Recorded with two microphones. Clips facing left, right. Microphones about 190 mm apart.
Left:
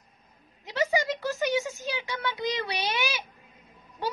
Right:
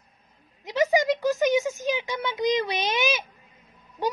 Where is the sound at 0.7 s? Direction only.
15° right (ahead or behind).